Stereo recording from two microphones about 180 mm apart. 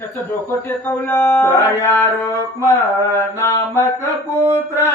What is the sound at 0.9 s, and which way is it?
A man's voice, 10° left (ahead or behind).